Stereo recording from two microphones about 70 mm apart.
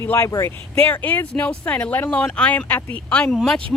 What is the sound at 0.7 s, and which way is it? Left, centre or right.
Speech, left.